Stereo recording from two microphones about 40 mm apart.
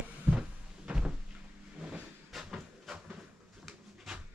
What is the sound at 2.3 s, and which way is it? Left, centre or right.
Hiss, centre.